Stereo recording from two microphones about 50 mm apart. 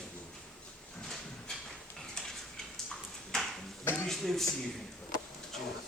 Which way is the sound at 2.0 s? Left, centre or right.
Centre.